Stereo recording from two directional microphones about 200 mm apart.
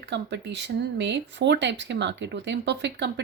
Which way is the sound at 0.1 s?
60° right (ahead or behind).